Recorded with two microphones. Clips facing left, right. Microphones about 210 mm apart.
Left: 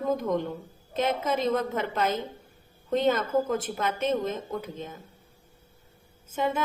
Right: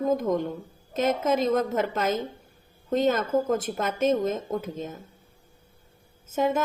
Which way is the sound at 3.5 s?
45° right (ahead or behind).